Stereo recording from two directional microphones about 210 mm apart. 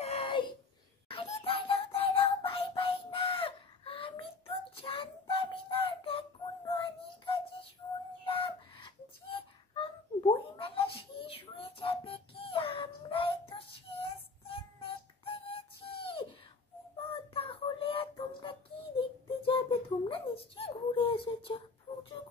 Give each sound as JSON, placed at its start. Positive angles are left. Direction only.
{"t": 0.0, "sound": "a sound", "side_deg": 30}
{"t": 1.0, "sound": "music", "side_deg": 25}
{"t": 5.3, "sound": "child singing", "side_deg": 25}
{"t": 7.8, "sound": "music", "side_deg": 20}
{"t": 8.3, "sound": "a sound", "side_deg": 25}
{"t": 10.3, "sound": "child singing", "side_deg": 25}
{"t": 14.1, "sound": "music", "side_deg": 25}
{"t": 17.0, "sound": "child singing", "side_deg": 25}
{"t": 20.1, "sound": "a sound", "side_deg": 25}